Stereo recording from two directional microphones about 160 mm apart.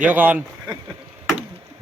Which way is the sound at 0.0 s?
10° right (ahead or behind).